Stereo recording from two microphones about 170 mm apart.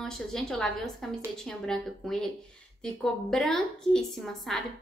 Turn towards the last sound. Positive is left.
turn(degrees=0)  # may be behind; listen again after turning